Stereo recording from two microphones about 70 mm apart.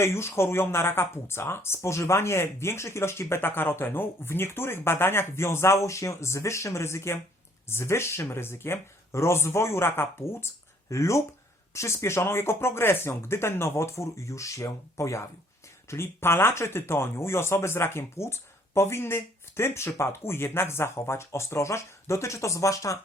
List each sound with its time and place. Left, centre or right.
0.0 s speech: left